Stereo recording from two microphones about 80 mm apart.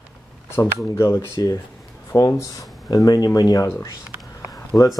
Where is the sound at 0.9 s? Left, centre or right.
Left.